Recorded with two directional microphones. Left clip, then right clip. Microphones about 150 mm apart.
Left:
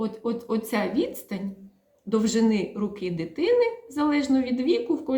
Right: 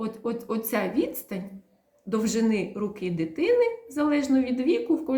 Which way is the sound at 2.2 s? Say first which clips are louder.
Left 1 dB; 20° left (ahead or behind).